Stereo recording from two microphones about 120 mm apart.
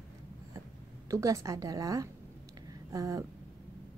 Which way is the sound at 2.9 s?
30° right (ahead or behind).